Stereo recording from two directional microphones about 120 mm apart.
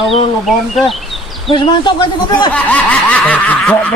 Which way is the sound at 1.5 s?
40° left (ahead or behind).